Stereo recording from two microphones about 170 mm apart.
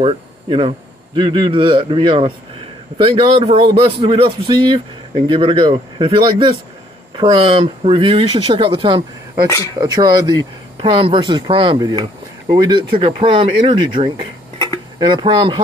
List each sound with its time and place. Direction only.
0.0 s a man's voice: 35° right (ahead or behind)